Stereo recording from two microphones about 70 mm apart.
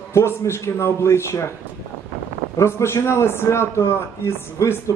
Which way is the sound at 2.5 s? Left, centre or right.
Left.